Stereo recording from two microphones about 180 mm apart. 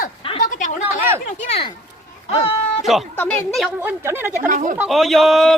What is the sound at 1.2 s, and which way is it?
Speech, 40° left (ahead or behind).